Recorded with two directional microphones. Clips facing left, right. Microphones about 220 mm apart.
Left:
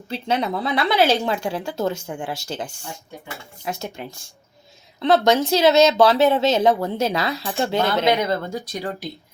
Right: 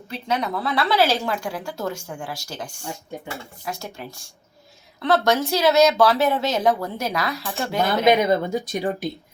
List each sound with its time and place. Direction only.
0.1 s a woman's voice: 30° left (ahead or behind)
0.7 s a woman's voice: 15° left (ahead or behind)
1.2 s a woman's voice: 25° left (ahead or behind)
2.8 s speech: 30° right (ahead or behind)
3.6 s a woman's voice: 20° left (ahead or behind)
7.9 s speech: 15° right (ahead or behind)